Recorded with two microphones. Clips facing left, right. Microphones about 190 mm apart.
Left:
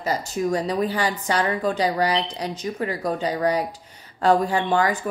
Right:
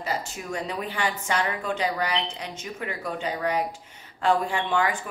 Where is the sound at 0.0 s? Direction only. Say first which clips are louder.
Left 7 dB; 40° left (ahead or behind).